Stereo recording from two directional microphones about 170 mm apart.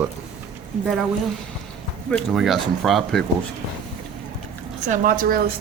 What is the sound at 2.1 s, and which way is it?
Speech, centre (ahead or behind).